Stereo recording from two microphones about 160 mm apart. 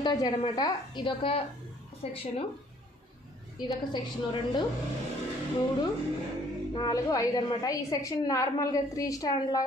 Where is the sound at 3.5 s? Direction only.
25° left (ahead or behind).